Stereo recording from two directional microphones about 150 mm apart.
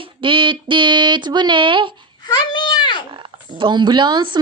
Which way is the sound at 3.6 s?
30° right (ahead or behind).